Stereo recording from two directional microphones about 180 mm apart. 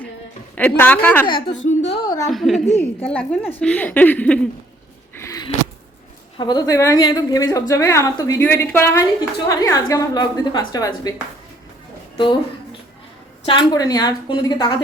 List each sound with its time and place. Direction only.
0.5 s a woman's voice: 10° left (ahead or behind)
1.3 s a woman's voice: 30° left (ahead or behind)
1.5 s a woman's voice: 90° left
2.3 s a woman's voice: centre (ahead or behind)
5.1 s a sound: 15° left (ahead or behind)
6.3 s a woman's voice: 25° left (ahead or behind)
12.1 s a woman's voice: 30° left (ahead or behind)
13.4 s a woman's voice: 30° left (ahead or behind)